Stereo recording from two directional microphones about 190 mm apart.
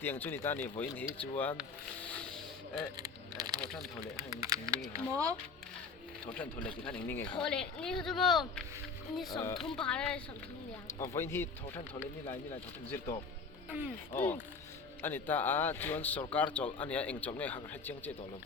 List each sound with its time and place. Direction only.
0.0 s a man's voice: 10° left (ahead or behind)
2.0 s a sound: 5° left (ahead or behind)
3.0 s speech: 20° right (ahead or behind)
6.3 s a man's voice: 5° left (ahead or behind)
9.3 s a man's voice: 20° left (ahead or behind)
9.6 s a man's voice: 5° left (ahead or behind)
13.7 s speech: 10° right (ahead or behind)
14.2 s a man's voice: 10° left (ahead or behind)